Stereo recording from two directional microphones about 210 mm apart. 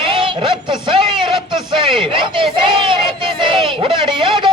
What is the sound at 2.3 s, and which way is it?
Speech, 25° right (ahead or behind).